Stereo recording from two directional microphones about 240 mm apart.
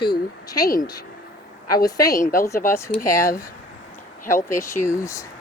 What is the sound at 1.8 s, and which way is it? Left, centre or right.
Speech, centre.